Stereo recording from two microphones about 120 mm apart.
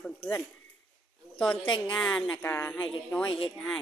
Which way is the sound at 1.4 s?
10° left (ahead or behind).